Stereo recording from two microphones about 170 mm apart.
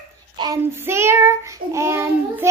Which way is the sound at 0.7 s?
15° right (ahead or behind).